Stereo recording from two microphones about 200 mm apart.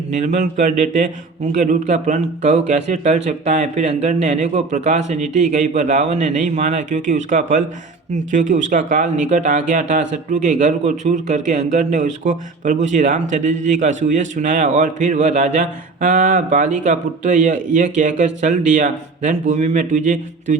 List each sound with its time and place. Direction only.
0.1 s speech: 35° right (ahead or behind)